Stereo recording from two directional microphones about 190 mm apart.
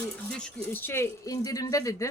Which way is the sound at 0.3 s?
5° left (ahead or behind).